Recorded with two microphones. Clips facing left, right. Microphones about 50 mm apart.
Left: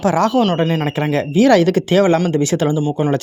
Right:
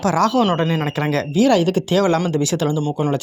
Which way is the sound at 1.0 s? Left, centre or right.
Centre.